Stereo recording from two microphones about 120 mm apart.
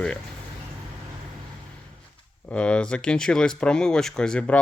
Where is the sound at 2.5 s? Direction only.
10° left (ahead or behind).